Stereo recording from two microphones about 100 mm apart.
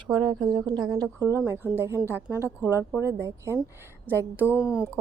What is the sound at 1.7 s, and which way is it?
A woman's voice, 25° right (ahead or behind).